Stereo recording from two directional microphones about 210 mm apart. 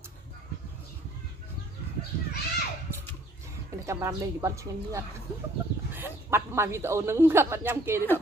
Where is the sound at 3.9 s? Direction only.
15° right (ahead or behind).